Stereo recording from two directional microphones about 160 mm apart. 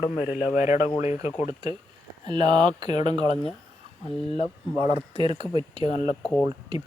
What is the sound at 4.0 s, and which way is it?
Speech, 35° left (ahead or behind).